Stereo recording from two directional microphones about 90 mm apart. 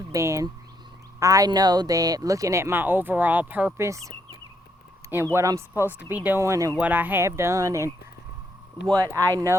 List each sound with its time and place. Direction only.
0.1 s speech: 35° right (ahead or behind); by 3.7 s 20° right (ahead or behind)
3.8 s speech: 35° right (ahead or behind); by 6.4 s 20° right (ahead or behind)
6.4 s speech: 35° right (ahead or behind)
6.7 s speech: 20° right (ahead or behind)
7.3 s speech: 30° right (ahead or behind)
9.1 s speech: 35° right (ahead or behind)